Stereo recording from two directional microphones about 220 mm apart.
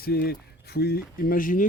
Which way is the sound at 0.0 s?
45° left (ahead or behind).